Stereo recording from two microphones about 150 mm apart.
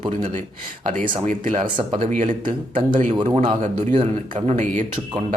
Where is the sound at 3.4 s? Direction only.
50° right (ahead or behind).